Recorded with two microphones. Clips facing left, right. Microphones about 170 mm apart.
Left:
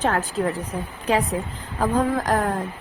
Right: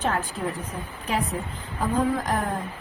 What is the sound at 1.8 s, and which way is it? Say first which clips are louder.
Speech: left 3 dB; 80° left.